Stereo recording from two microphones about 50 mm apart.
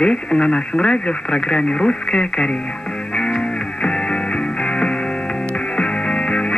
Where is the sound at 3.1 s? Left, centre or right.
Centre.